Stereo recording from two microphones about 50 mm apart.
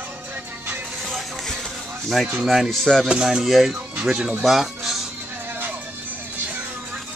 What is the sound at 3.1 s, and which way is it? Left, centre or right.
Speech, centre.